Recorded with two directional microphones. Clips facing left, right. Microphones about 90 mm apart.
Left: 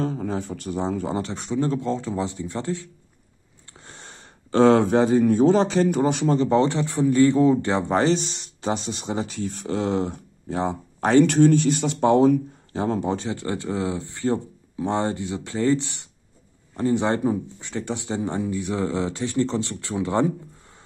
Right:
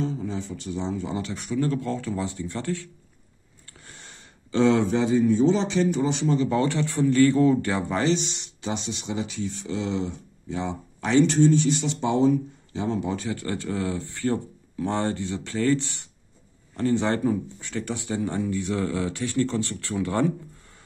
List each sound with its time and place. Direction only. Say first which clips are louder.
0.0 s speech: left 3 dB; 50° left (ahead or behind); by 2.9 s 20° left (ahead or behind)
3.8 s a sound: left 4 dB; 35° left (ahead or behind); by 5.2 s 50° left (ahead or behind)
5.2 s speech: left 3 dB; 55° left (ahead or behind)
11.2 s speech: left 3 dB; 60° left (ahead or behind); by 20.3 s 20° left (ahead or behind)